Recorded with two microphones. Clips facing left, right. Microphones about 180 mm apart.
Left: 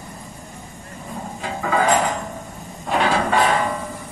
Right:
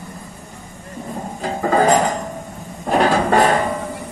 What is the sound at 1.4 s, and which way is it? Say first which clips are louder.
Music: right 4 dB; 40° right (ahead or behind).